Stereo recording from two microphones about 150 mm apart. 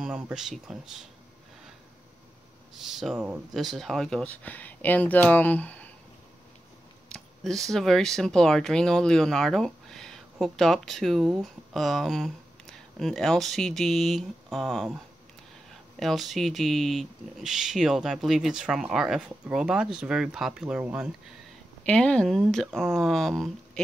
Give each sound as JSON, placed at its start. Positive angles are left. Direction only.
{"t": 0.0, "sound": "speech", "side_deg": -5}
{"t": 2.8, "sound": "speech", "side_deg": 0}
{"t": 7.1, "sound": "speech", "side_deg": 5}
{"t": 16.0, "sound": "speech", "side_deg": 0}
{"t": 21.8, "sound": "speech", "side_deg": 5}